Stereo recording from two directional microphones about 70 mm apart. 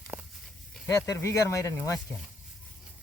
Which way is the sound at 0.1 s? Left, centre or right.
Right.